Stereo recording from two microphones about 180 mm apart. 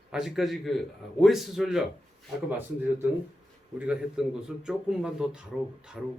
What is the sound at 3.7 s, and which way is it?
A man's voice, 5° right (ahead or behind).